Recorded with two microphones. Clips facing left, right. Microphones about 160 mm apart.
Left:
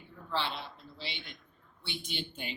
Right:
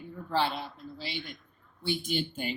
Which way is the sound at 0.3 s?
45° right (ahead or behind).